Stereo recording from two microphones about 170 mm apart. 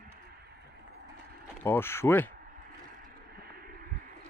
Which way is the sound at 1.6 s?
15° left (ahead or behind).